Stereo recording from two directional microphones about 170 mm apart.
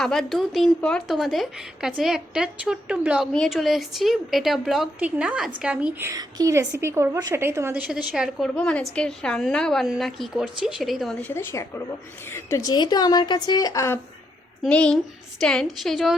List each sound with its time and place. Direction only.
0.0 s a woman's voice: centre (ahead or behind)
8.5 s a woman's voice: 5° left (ahead or behind)
14.6 s a woman's voice: 5° left (ahead or behind)